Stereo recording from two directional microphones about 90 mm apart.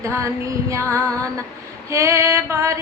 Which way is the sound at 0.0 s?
35° right (ahead or behind).